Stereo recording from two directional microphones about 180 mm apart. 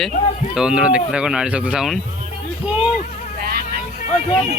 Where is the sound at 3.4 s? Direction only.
55° right (ahead or behind).